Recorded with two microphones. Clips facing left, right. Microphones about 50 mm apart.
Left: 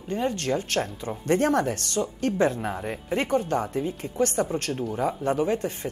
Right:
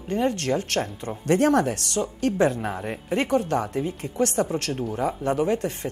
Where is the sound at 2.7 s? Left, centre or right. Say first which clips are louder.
Right 1 dB; centre.